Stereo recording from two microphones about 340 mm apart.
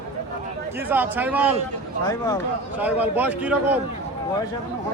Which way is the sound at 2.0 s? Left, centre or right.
Centre.